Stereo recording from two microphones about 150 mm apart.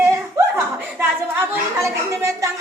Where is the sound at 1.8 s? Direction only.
20° right (ahead or behind).